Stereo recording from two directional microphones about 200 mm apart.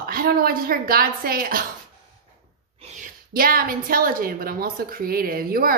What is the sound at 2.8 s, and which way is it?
Speech, 45° right (ahead or behind).